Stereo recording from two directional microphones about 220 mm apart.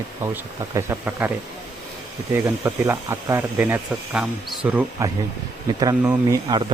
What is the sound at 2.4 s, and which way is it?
Speech, 15° right (ahead or behind).